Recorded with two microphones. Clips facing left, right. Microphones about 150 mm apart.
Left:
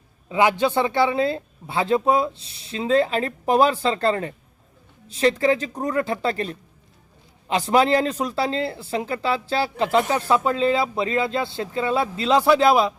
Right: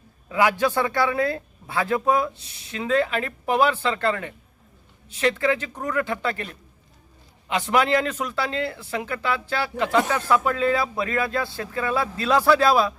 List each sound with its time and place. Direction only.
0.3 s a man's voice: 20° left (ahead or behind)